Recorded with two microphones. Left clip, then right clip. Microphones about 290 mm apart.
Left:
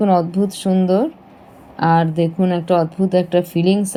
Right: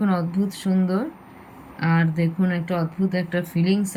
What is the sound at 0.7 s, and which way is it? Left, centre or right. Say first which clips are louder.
Speech: left 10 dB; left.